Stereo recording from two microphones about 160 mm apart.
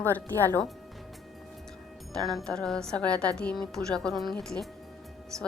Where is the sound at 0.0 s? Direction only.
10° left (ahead or behind).